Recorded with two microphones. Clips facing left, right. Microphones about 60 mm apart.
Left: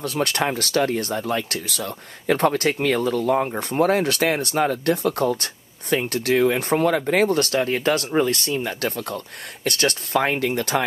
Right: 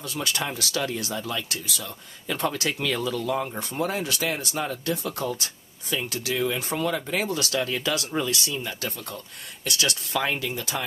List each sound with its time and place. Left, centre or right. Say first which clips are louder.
0.0 s speech: left 7 dB; left